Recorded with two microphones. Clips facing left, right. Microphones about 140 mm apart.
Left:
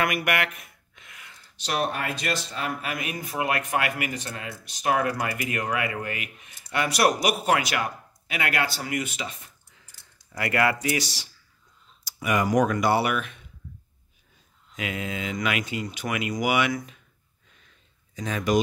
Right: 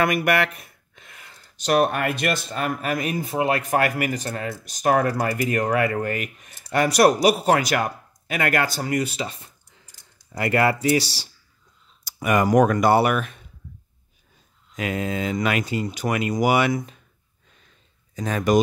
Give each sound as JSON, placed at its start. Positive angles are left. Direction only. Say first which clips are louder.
{"t": 0.0, "sound": "a sound", "louder": "right 5 dB", "side_deg": -35}
{"t": 1.7, "sound": "speech", "louder": "right 7 dB", "side_deg": -55}
{"t": 3.7, "sound": "speech", "louder": "right 5 dB", "side_deg": -40}
{"t": 12.0, "sound": "speech", "louder": "right 4 dB", "side_deg": -50}
{"t": 14.8, "sound": "speech", "louder": "right 6 dB", "side_deg": -40}
{"t": 16.7, "sound": "speech", "louder": "right 5 dB", "side_deg": -25}
{"t": 18.1, "sound": "speech", "louder": "right 4 dB", "side_deg": -50}